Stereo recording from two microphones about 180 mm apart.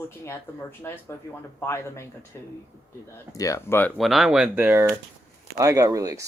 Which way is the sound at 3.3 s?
20° left (ahead or behind).